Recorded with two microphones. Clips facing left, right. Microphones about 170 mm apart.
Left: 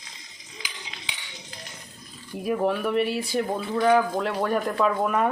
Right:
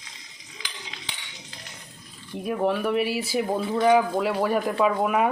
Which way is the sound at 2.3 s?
Centre (ahead or behind).